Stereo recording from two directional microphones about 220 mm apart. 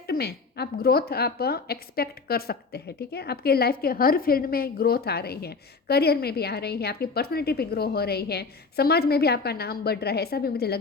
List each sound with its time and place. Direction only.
0.1 s a woman's voice: 45° left (ahead or behind)